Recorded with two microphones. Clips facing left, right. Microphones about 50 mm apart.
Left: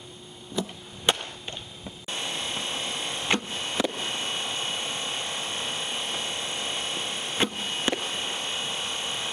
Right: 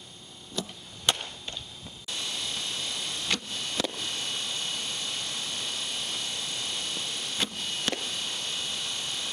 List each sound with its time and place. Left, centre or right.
0.6 s chop: centre
1.1 s whip: centre
2.0 s a sound: left
3.9 s helicopter: left